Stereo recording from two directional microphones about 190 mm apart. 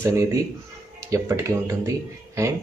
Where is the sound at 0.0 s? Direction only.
15° right (ahead or behind).